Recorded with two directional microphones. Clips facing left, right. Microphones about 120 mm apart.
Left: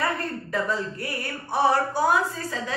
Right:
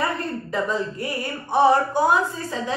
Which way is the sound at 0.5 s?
20° right (ahead or behind).